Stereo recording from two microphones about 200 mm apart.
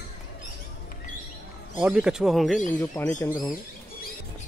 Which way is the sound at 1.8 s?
5° right (ahead or behind).